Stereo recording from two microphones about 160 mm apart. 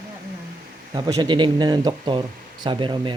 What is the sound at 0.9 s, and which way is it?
Speech, 25° right (ahead or behind).